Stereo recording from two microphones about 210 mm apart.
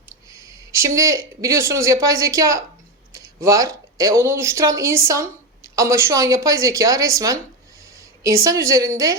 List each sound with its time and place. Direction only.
0.1 s a woman's voice: 15° right (ahead or behind)